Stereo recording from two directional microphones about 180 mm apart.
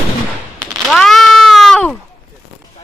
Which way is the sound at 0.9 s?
Centre (ahead or behind).